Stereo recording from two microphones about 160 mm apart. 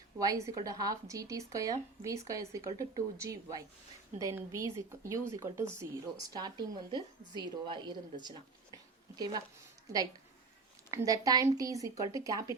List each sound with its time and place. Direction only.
0.2 s speech: 20° right (ahead or behind)
8.2 s a sound: 25° right (ahead or behind)
10.9 s speech: 20° right (ahead or behind)